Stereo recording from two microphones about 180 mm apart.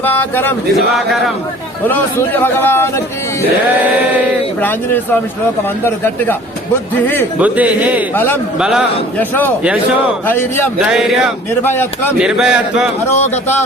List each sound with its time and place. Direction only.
0.0 s a man's voice: 10° left (ahead or behind)
1.9 s a man's voice: 10° left (ahead or behind)
7.3 s speech: 10° right (ahead or behind)
8.1 s a man's voice: 10° left (ahead or behind)
8.5 s speech: 5° right (ahead or behind)
9.1 s a man's voice: 10° left (ahead or behind)
10.8 s speech: 5° right (ahead or behind)
11.6 s a man's voice: 10° left (ahead or behind)
12.2 s speech: 5° right (ahead or behind)